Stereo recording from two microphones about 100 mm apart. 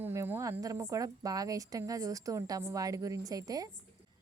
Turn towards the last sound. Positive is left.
turn(degrees=-40)  # may be behind; listen again after turning